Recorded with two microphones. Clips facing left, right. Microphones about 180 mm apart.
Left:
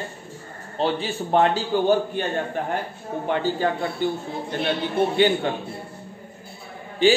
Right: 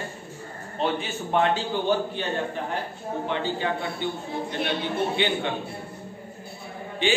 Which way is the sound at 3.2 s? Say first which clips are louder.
Left 5 dB; 45° left (ahead or behind).